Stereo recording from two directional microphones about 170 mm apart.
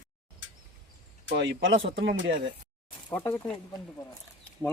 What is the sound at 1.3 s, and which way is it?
Speech, 90° right.